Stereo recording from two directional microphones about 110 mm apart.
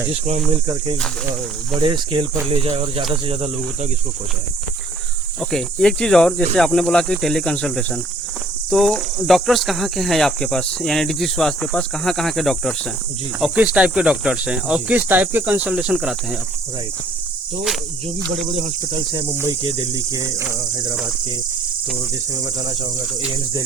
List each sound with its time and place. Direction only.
0.1 s speech: 85° right
1.8 s speech: 50° right (ahead or behind)
5.4 s cricket: 5° left (ahead or behind)
6.6 s speech: 5° left (ahead or behind)
8.7 s cricket: centre (ahead or behind)
13.6 s speech: 10° right (ahead or behind)
19.6 s cricket: 40° right (ahead or behind)